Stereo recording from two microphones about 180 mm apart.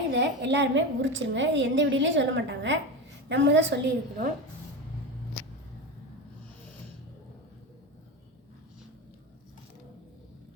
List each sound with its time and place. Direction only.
0.1 s a woman's voice: 80° right